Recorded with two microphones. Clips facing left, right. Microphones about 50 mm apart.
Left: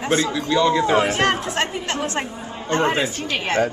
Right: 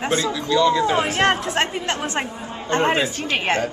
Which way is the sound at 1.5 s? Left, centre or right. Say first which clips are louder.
Right 1 dB; centre.